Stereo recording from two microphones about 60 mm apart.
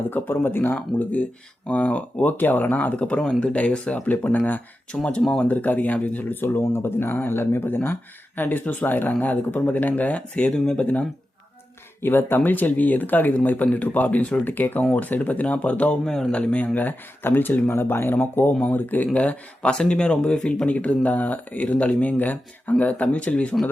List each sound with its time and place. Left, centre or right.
0.0 s speech: left
0.9 s speech: left
3.0 s speech: centre
5.5 s speech: left
12.0 s speech: left
19.7 s speech: centre
20.7 s speech: left